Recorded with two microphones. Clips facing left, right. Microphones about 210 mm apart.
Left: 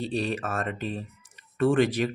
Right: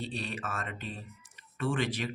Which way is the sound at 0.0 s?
40° left (ahead or behind).